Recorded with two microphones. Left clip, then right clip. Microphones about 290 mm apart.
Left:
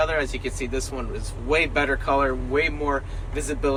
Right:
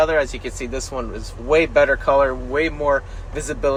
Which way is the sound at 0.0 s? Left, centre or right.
Right.